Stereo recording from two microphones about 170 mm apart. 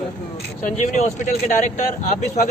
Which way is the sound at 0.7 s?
45° left (ahead or behind).